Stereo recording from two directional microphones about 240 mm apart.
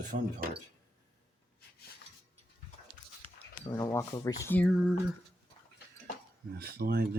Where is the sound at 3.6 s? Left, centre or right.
Centre.